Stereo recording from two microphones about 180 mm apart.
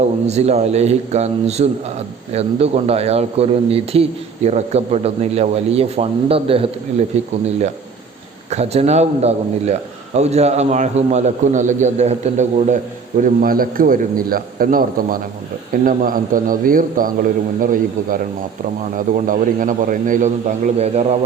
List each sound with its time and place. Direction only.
0.0 s a man's voice: 35° right (ahead or behind)
8.4 s a man's voice: 35° right (ahead or behind)